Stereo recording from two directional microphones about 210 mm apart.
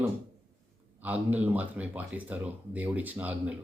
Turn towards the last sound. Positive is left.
turn(degrees=-5)  # may be behind; listen again after turning